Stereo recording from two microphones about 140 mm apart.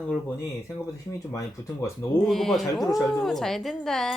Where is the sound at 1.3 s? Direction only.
20° left (ahead or behind).